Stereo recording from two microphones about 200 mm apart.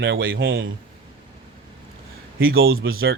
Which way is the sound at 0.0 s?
70° right (ahead or behind).